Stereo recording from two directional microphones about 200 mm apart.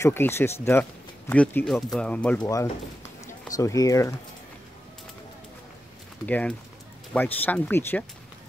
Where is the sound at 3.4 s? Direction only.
15° left (ahead or behind).